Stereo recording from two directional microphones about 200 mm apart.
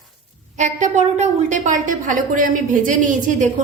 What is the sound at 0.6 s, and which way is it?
A woman's voice, 35° right (ahead or behind).